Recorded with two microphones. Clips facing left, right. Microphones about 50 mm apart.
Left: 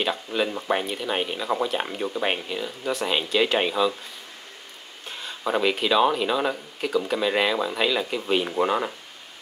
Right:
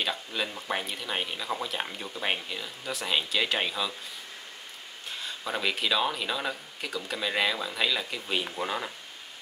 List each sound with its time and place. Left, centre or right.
0.0 s speech: centre
2.9 s speech: centre
5.0 s a sound: centre
5.4 s speech: centre